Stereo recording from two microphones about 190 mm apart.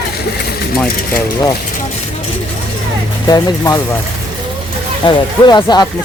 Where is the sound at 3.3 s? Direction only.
20° left (ahead or behind).